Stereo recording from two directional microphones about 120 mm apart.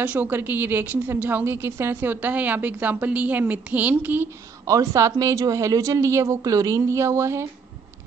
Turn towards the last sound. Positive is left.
turn(degrees=-25)  # may be behind; listen again after turning